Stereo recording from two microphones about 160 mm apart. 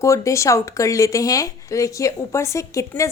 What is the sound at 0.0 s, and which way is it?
Speech, 20° left (ahead or behind).